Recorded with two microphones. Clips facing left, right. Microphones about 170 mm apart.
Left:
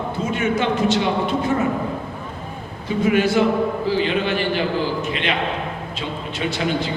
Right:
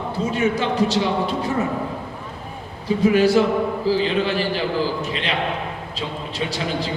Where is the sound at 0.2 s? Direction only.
35° right (ahead or behind).